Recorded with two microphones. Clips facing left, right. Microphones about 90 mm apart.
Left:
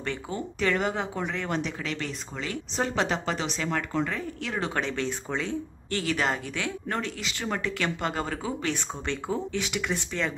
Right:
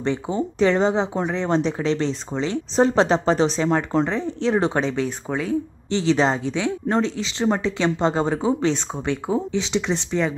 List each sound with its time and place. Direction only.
0.0 s speech: 20° right (ahead or behind)
4.8 s speech: 15° right (ahead or behind)
5.9 s speech: 20° right (ahead or behind)